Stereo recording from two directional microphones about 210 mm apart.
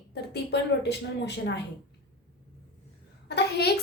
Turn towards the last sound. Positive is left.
turn(degrees=50)  # may be behind; listen again after turning